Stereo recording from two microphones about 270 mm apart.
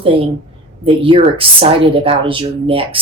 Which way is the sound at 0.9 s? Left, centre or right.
Centre.